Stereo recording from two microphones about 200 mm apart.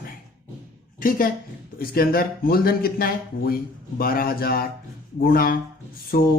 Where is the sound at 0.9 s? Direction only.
45° left (ahead or behind).